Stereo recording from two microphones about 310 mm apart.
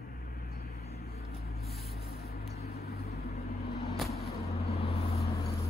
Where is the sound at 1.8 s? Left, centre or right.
Left.